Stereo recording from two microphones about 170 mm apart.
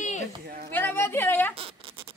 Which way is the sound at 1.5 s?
35° right (ahead or behind).